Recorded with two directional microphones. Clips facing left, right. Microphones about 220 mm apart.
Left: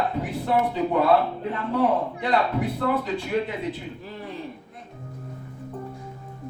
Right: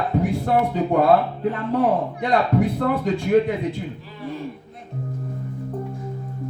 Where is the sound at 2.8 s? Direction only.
45° right (ahead or behind).